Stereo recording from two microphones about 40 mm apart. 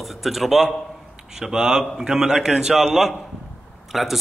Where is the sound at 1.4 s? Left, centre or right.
Centre.